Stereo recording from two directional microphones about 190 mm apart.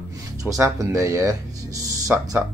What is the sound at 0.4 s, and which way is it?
Speech, 15° right (ahead or behind).